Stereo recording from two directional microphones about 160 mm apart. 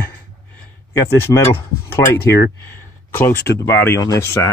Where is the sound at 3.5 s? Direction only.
15° left (ahead or behind).